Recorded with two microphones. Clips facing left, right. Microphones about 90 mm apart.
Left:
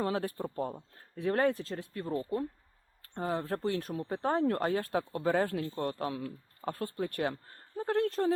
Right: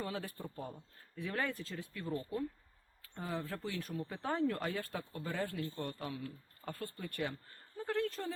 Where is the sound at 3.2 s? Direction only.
50° left (ahead or behind).